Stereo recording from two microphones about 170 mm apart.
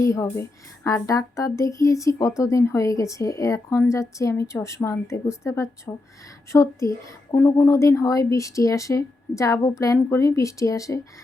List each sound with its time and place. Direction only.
0.0 s a woman's voice: 20° left (ahead or behind)